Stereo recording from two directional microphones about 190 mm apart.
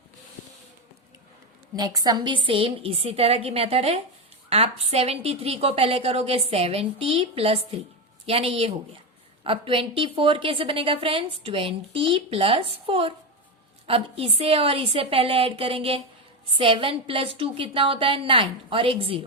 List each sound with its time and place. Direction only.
1.7 s a woman's voice: 20° right (ahead or behind)